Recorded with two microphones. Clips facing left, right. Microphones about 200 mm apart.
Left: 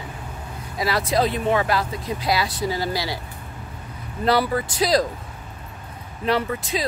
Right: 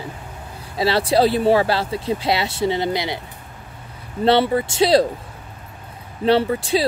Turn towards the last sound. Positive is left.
turn(degrees=-30)  # may be behind; listen again after turning